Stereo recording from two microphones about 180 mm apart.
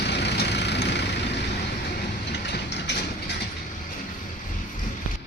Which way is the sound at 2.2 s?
70° left (ahead or behind).